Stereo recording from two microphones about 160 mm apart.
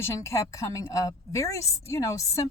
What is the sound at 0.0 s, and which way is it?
A woman's voice, 15° left (ahead or behind).